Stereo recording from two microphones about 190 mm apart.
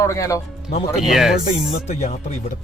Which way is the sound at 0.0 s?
15° left (ahead or behind).